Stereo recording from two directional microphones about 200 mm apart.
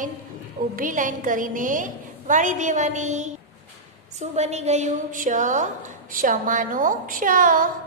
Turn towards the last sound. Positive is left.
turn(degrees=-45)  # may be behind; listen again after turning